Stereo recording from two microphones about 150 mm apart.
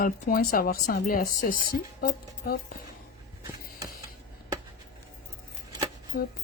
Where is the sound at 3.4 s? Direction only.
20° right (ahead or behind).